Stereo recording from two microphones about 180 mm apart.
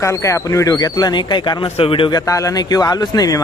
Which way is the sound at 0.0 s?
15° left (ahead or behind).